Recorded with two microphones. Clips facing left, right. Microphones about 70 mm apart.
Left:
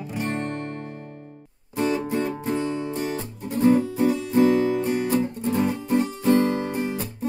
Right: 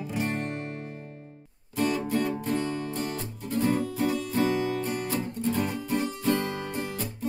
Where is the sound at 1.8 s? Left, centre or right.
Centre.